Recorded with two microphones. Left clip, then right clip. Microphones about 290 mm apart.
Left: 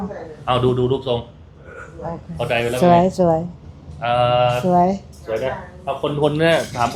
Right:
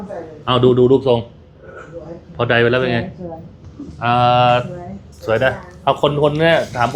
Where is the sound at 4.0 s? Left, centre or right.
Right.